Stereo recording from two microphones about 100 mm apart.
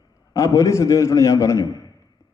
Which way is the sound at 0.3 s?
35° left (ahead or behind).